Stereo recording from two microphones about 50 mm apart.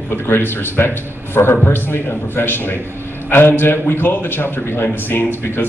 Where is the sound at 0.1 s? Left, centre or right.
Left.